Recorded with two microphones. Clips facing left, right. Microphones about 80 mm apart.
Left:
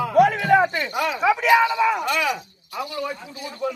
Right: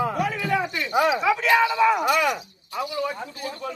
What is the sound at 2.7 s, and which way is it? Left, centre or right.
Speech, right.